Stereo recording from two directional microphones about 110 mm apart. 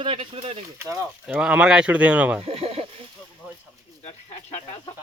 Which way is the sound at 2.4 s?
60° right (ahead or behind).